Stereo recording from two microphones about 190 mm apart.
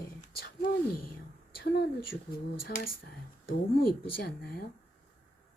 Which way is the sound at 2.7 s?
45° left (ahead or behind).